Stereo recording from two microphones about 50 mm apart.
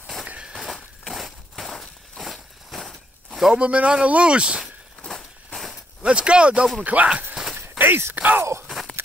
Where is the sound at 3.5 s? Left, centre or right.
Right.